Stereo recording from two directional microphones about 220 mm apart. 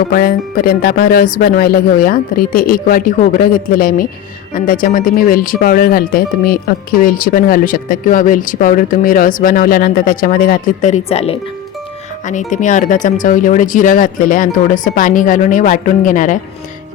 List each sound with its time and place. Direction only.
0.1 s speech: 40° left (ahead or behind)
12.5 s speech: 35° left (ahead or behind)